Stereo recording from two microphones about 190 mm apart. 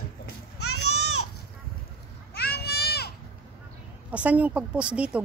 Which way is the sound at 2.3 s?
55° left (ahead or behind).